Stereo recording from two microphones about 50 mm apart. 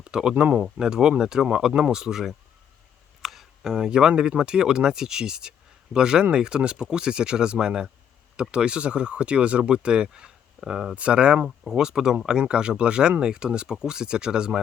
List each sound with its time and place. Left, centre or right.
0.0 s speech: centre
10.9 s speech: right
11.4 s speech: centre